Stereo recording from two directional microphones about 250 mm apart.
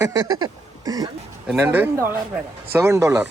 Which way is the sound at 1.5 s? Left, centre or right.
Centre.